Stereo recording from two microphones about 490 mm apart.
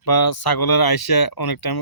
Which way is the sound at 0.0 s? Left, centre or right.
Left.